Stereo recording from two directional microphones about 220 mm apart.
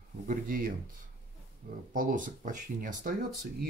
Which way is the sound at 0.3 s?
40° right (ahead or behind).